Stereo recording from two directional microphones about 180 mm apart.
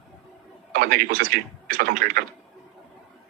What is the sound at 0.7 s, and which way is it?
Speech, 50° right (ahead or behind).